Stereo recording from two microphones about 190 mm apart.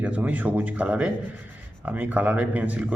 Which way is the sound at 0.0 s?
5° right (ahead or behind).